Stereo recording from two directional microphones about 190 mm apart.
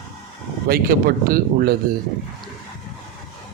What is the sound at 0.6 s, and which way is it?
Speech, 50° right (ahead or behind).